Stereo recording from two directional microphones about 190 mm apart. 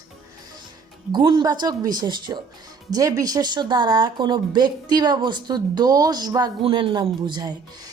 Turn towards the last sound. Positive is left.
turn(degrees=-20)  # may be behind; listen again after turning